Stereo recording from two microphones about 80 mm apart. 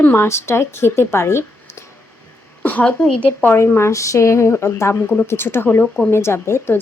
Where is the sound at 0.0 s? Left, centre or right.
Left.